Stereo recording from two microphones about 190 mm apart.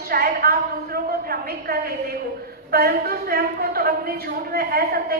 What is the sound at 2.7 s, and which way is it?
A woman's voice, 55° right (ahead or behind).